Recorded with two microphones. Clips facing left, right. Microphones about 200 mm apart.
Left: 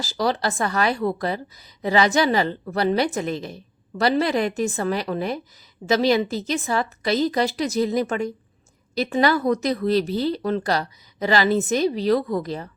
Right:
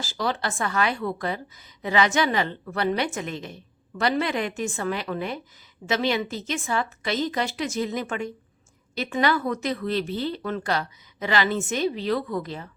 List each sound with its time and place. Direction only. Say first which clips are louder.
0.0 s a woman's voice: left 5 dB; 40° left (ahead or behind)